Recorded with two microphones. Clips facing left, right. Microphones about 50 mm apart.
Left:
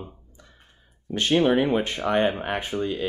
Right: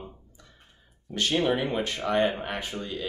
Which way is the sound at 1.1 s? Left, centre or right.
Left.